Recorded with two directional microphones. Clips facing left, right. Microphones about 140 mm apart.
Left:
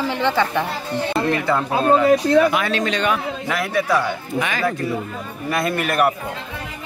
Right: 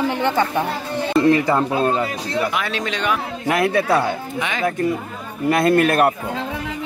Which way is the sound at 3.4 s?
55° right (ahead or behind).